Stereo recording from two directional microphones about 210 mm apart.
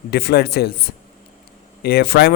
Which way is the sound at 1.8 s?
50° left (ahead or behind).